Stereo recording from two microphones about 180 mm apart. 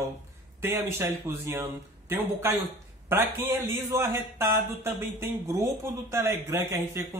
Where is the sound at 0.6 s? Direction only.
15° right (ahead or behind).